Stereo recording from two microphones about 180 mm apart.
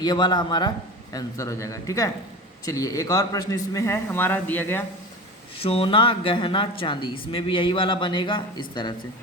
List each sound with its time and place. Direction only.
0.0 s a man's voice: 25° left (ahead or behind)
5.5 s speech: 30° left (ahead or behind)